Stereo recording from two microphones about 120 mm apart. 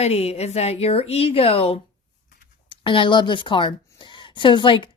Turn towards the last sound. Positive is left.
turn(degrees=45)  # may be behind; listen again after turning